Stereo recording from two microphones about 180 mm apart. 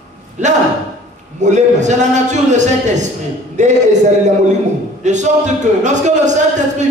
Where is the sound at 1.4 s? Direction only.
40° right (ahead or behind).